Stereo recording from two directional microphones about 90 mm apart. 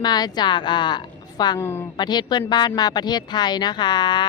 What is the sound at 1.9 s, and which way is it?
Speech, 55° left (ahead or behind).